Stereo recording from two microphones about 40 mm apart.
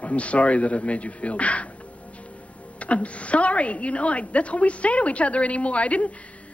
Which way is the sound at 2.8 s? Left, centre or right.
Left.